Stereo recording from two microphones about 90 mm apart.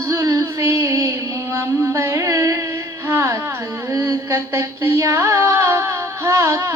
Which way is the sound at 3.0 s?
30° right (ahead or behind).